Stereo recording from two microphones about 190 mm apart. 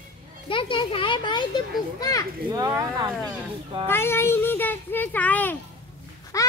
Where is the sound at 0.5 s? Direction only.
25° left (ahead or behind).